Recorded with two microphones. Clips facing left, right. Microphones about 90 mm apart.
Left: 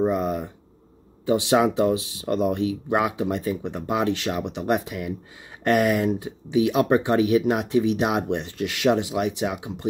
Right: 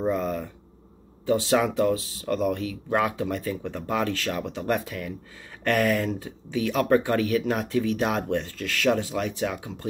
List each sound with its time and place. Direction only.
0.0 s speech: 20° left (ahead or behind)